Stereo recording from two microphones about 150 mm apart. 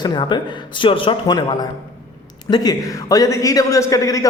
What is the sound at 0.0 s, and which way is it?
Speech, 30° left (ahead or behind).